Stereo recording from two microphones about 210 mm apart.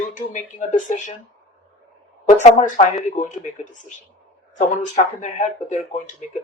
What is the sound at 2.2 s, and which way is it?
A woman's voice, 35° left (ahead or behind).